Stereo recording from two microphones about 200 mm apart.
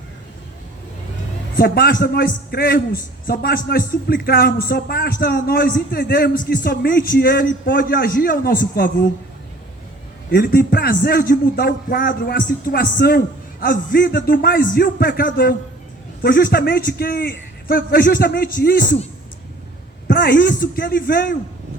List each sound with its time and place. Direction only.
1.5 s a man's voice: 50° left (ahead or behind)
10.2 s a man's voice: 50° left (ahead or behind)
20.1 s a man's voice: 50° left (ahead or behind)